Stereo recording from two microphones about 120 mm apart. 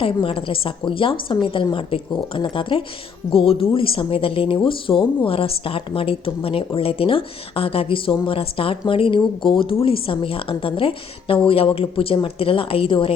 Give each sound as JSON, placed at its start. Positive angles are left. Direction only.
{"t": 0.0, "sound": "speech", "side_deg": 50}